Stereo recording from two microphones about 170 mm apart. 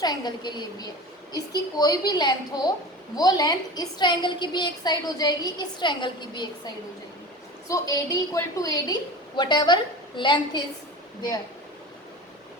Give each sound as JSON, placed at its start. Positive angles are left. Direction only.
{"t": 0.0, "sound": "a woman's voice", "side_deg": 25}
{"t": 7.7, "sound": "a woman's voice", "side_deg": 20}